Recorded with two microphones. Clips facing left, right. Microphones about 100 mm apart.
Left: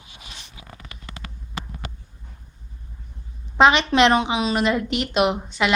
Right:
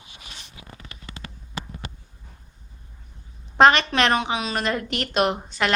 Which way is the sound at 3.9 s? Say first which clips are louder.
Left 4 dB; 20° left (ahead or behind).